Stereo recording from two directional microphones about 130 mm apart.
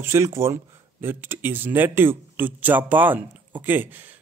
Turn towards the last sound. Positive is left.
turn(degrees=-15)  # may be behind; listen again after turning